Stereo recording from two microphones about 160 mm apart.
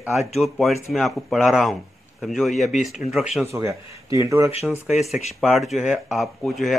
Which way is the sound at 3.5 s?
20° right (ahead or behind).